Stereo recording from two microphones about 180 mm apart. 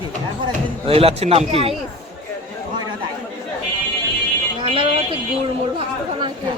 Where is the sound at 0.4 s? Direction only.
30° right (ahead or behind).